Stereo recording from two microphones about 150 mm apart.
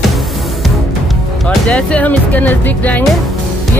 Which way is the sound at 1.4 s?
5° left (ahead or behind).